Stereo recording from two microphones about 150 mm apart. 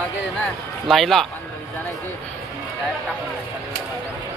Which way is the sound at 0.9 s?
Centre (ahead or behind).